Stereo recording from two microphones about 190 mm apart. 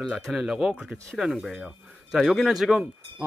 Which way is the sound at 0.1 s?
5° right (ahead or behind).